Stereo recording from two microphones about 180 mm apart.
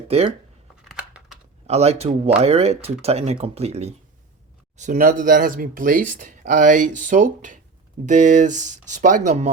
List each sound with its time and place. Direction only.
0.1 s speech: 35° right (ahead or behind)
0.9 s typing: 5° right (ahead or behind)
1.6 s speech: 35° right (ahead or behind)
4.8 s speech: 45° right (ahead or behind)